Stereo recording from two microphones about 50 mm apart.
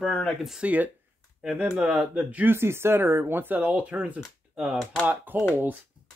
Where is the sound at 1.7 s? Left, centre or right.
Centre.